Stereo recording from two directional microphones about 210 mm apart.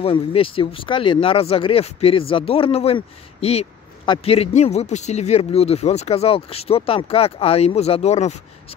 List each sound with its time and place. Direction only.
0.0 s speech: 25° left (ahead or behind)